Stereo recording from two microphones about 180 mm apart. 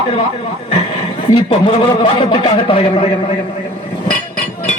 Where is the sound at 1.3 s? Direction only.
30° left (ahead or behind).